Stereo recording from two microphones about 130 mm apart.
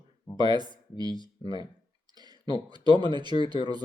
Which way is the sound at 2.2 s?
35° right (ahead or behind).